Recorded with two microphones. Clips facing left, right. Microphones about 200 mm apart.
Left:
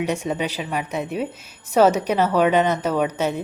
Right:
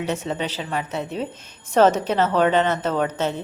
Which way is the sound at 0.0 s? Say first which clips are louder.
Left 2 dB; 15° left (ahead or behind).